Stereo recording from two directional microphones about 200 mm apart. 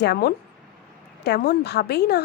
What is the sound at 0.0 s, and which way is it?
A woman's voice, 55° left (ahead or behind).